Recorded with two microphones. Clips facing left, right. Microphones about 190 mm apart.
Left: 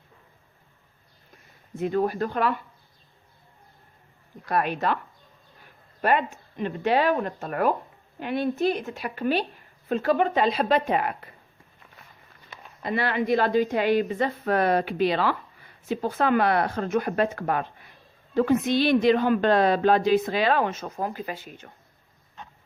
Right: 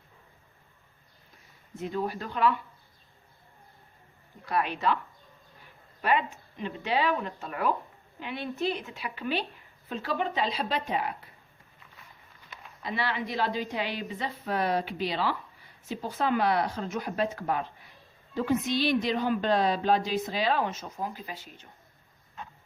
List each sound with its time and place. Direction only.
1.8 s a woman's voice: 55° left (ahead or behind)
4.4 s a woman's voice: 45° left (ahead or behind)
6.0 s a woman's voice: 45° left (ahead or behind)
12.8 s a woman's voice: 55° left (ahead or behind)